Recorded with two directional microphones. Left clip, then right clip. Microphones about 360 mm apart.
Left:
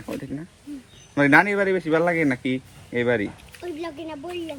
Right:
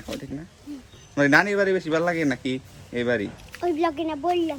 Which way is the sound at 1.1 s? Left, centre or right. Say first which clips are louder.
Left 2 dB; centre.